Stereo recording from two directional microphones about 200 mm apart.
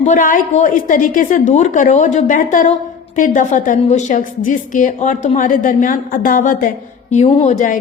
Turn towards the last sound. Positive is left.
turn(degrees=40)  # may be behind; listen again after turning